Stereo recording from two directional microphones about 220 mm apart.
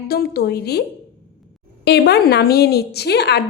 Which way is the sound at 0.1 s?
45° left (ahead or behind).